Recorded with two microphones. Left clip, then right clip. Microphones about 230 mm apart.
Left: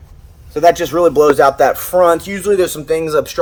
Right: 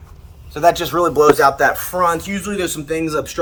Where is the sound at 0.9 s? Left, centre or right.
Left.